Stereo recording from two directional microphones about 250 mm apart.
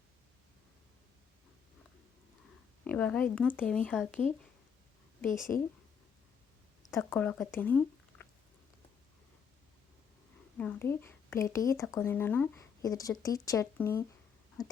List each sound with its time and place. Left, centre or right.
2.8 s speech: centre
5.2 s a woman's voice: left
6.9 s speech: centre
10.6 s speech: centre